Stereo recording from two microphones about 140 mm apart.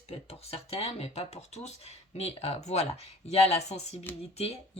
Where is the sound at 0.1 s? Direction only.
45° left (ahead or behind).